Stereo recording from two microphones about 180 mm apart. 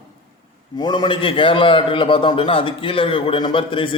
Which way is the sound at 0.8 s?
25° left (ahead or behind).